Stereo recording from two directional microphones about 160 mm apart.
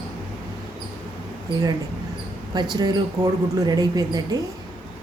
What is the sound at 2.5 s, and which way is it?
Speech, 25° right (ahead or behind).